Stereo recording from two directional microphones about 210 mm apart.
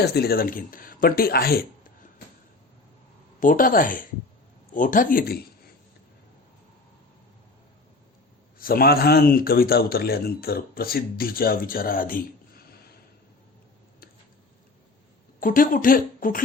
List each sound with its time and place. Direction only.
0.0 s a man's voice: 50° left (ahead or behind)
3.4 s speech: 40° left (ahead or behind)
8.5 s a man's voice: 45° left (ahead or behind)
15.4 s speech: 40° left (ahead or behind)